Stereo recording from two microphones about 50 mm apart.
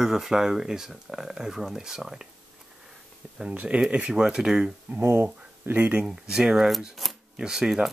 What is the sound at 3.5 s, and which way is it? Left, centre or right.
Speech, right.